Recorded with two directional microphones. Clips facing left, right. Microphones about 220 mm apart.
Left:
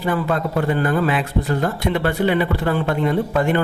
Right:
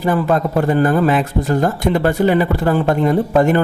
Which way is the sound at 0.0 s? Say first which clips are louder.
Right 5 dB; 45° right (ahead or behind).